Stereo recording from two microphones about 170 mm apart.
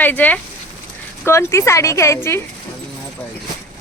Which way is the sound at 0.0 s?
10° left (ahead or behind).